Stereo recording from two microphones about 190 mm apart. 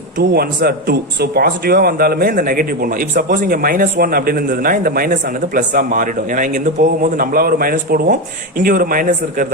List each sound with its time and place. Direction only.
0.2 s speech: 55° right (ahead or behind)